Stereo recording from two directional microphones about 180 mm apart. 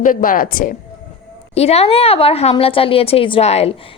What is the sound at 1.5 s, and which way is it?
A woman's voice, 35° left (ahead or behind).